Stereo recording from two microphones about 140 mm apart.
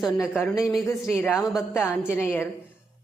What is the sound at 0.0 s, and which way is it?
A man's voice, centre (ahead or behind).